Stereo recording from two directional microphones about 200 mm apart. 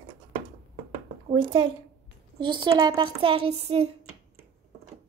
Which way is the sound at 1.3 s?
25° right (ahead or behind).